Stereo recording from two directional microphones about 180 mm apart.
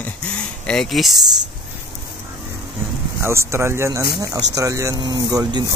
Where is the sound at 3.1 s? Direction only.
15° right (ahead or behind).